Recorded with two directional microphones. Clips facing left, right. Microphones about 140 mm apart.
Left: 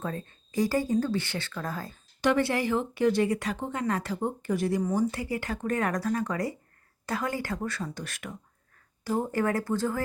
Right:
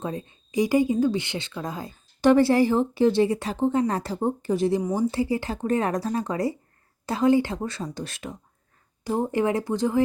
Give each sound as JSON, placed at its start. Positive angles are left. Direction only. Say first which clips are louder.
{"t": 0.0, "sound": "speech", "louder": "right 3 dB", "side_deg": -15}
{"t": 2.2, "sound": "speech", "louder": "right 7 dB", "side_deg": -35}